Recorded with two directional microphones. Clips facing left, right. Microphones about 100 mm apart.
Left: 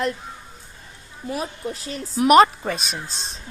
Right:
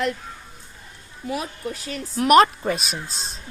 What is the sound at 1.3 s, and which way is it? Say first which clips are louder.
Speech: even; 35° left (ahead or behind).